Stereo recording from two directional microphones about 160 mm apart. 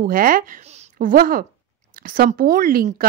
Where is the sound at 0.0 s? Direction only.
60° right (ahead or behind).